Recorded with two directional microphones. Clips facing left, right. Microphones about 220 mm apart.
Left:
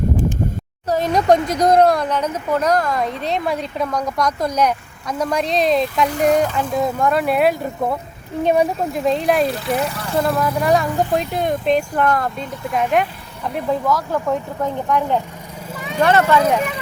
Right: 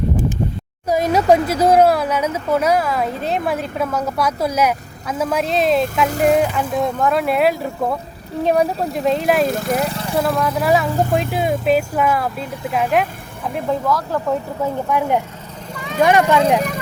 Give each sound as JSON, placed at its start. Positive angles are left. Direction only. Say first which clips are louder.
{"t": 0.9, "sound": "speech", "louder": "right 1 dB", "side_deg": -10}
{"t": 9.5, "sound": "speech", "louder": "right 2 dB", "side_deg": -45}
{"t": 9.9, "sound": "vehicle", "louder": "right 2 dB", "side_deg": -20}
{"t": 10.2, "sound": "speech", "louder": "even", "side_deg": 0}
{"t": 16.6, "sound": "speech", "louder": "right 1 dB", "side_deg": -40}